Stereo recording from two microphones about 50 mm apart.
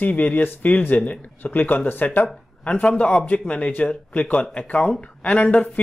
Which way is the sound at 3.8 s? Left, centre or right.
Left.